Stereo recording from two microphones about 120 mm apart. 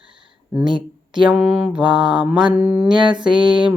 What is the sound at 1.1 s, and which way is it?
Speech, 40° right (ahead or behind).